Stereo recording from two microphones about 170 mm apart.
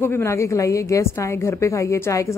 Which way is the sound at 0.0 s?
15° left (ahead or behind).